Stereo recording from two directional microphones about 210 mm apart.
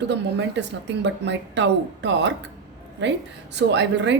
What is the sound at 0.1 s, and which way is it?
A woman's voice, 55° right (ahead or behind).